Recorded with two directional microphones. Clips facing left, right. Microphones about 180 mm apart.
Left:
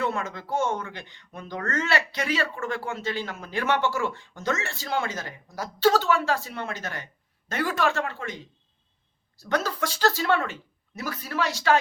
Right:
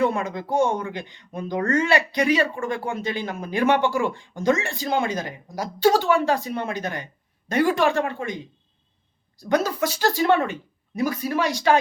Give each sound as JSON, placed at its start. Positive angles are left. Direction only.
{"t": 0.0, "sound": "speech", "side_deg": -15}